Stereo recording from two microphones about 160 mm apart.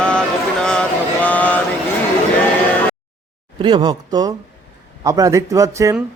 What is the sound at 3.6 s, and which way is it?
Speech, 30° right (ahead or behind).